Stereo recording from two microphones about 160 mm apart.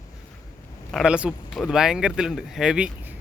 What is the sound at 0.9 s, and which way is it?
Speech, 5° right (ahead or behind).